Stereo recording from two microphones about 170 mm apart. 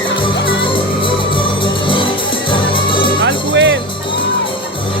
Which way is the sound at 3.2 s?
90° right.